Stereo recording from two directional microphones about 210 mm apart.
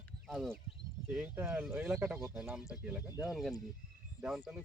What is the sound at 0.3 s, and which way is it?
Speech, centre (ahead or behind).